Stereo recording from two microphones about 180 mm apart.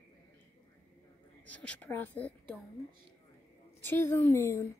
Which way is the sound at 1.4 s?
5° left (ahead or behind).